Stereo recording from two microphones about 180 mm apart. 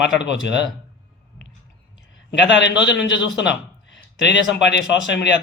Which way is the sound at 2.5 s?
75° left (ahead or behind).